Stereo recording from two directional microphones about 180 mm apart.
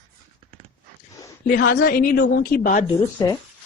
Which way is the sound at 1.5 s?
50° left (ahead or behind).